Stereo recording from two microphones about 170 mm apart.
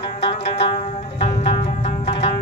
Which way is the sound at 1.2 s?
35° left (ahead or behind).